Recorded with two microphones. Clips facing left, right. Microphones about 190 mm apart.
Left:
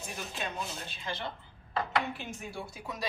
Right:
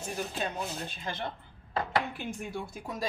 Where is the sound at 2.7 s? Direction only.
50° right (ahead or behind).